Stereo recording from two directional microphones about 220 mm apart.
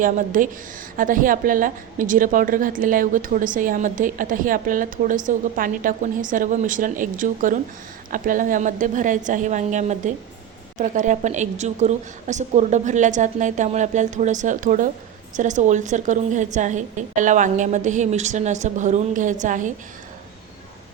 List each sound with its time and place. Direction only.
0.0 s a woman's voice: 35° right (ahead or behind)